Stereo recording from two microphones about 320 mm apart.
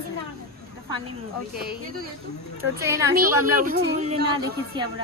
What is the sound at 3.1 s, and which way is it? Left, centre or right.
A woman's voice, right.